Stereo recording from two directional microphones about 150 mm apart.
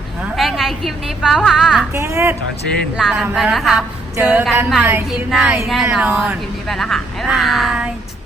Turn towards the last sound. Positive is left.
turn(degrees=-5)  # may be behind; listen again after turning